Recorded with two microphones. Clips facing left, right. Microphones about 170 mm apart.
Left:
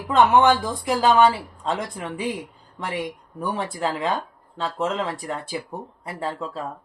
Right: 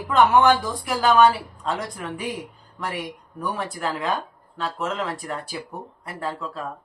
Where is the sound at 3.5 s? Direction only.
25° left (ahead or behind).